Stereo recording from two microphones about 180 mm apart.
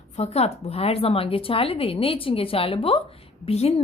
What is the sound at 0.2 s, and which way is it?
A woman's voice, 35° left (ahead or behind).